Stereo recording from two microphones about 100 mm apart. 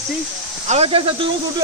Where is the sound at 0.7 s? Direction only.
80° right.